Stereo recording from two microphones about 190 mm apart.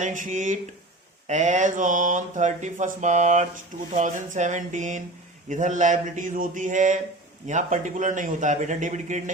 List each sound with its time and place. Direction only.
0.0 s speech: 40° right (ahead or behind)